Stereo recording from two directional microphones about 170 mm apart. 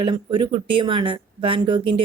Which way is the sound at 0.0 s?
30° right (ahead or behind).